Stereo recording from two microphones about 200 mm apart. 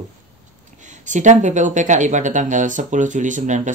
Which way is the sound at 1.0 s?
40° right (ahead or behind).